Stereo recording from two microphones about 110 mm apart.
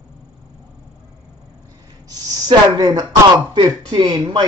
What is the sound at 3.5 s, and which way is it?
Speech, 45° right (ahead or behind).